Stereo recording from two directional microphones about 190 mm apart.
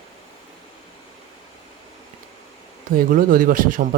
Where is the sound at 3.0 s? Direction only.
45° right (ahead or behind).